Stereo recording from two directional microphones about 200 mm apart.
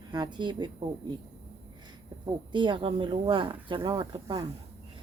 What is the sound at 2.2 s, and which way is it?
Speech, 25° right (ahead or behind).